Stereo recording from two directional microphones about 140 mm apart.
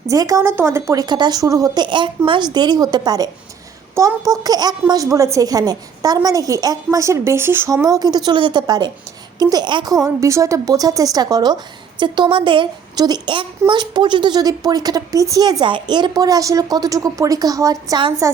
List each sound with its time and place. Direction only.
0.1 s a woman's voice: 25° right (ahead or behind)